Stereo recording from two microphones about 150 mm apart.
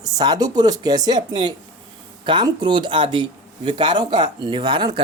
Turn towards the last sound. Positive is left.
turn(degrees=-30)  # may be behind; listen again after turning